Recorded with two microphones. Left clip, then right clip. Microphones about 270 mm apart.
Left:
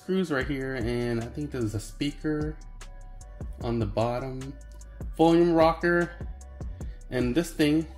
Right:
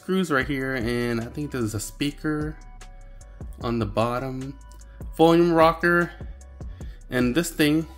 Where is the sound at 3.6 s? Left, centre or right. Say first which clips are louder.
Right 3 dB; right.